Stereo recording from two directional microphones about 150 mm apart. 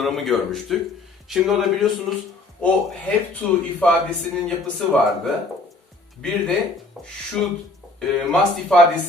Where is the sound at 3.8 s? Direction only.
5° left (ahead or behind).